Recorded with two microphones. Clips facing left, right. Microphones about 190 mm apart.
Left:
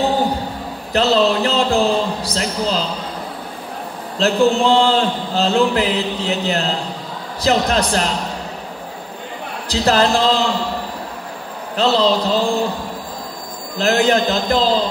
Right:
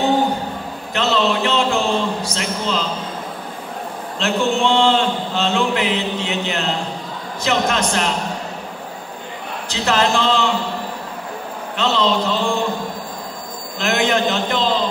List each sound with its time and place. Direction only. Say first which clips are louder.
0.9 s a man's voice: left 4 dB; 35° left (ahead or behind)
4.2 s a man's voice: left 4 dB; 35° left (ahead or behind)
9.7 s a man's voice: left 3 dB; 35° left (ahead or behind)
11.7 s a man's voice: left 3 dB; 35° left (ahead or behind)
13.7 s a man's voice: left 3 dB; 35° left (ahead or behind)